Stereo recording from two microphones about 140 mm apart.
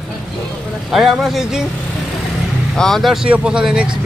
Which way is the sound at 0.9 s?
Centre (ahead or behind).